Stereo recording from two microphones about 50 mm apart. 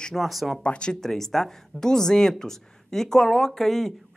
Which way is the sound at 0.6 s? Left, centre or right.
Left.